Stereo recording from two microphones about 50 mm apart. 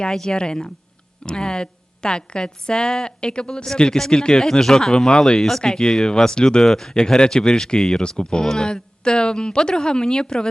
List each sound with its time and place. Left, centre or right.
0.0 s speech: centre